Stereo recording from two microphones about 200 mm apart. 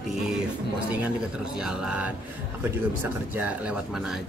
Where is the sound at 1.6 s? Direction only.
5° right (ahead or behind).